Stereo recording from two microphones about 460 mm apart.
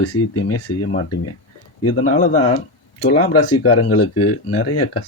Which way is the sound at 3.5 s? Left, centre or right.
Left.